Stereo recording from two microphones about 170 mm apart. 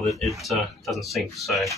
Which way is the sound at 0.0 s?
Centre (ahead or behind).